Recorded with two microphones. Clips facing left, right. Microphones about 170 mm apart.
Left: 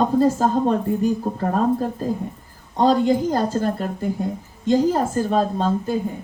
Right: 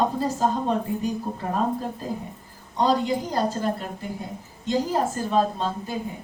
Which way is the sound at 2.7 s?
50° left (ahead or behind).